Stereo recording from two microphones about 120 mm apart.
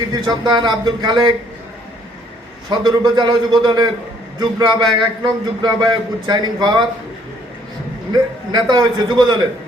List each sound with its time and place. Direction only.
0.1 s a man's voice: 35° right (ahead or behind)
2.6 s a man's voice: 35° right (ahead or behind)
8.7 s a man's voice: 35° right (ahead or behind)